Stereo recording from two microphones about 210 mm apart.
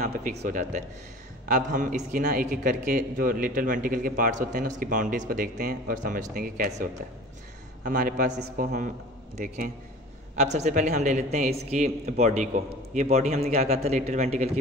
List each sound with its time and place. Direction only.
0.0 s a man's voice: 35° right (ahead or behind)
10.3 s a man's voice: 35° right (ahead or behind)